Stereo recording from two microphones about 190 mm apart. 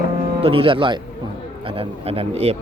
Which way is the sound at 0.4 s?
30° right (ahead or behind).